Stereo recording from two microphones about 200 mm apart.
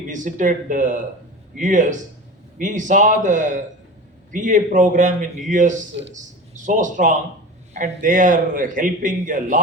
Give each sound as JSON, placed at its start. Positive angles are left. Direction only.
{"t": 0.1, "sound": "a man's voice", "side_deg": -40}